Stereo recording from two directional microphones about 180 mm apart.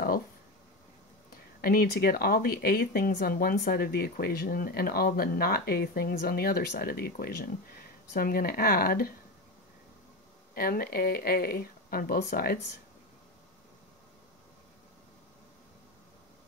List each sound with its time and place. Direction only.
1.6 s speech: 55° left (ahead or behind)
10.5 s speech: 55° left (ahead or behind)